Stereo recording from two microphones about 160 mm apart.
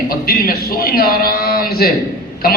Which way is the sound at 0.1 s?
70° left (ahead or behind).